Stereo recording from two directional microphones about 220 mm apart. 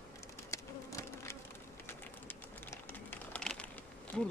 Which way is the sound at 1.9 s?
10° left (ahead or behind).